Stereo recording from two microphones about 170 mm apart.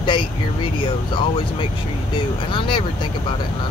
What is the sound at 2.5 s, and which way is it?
Speech, 30° left (ahead or behind).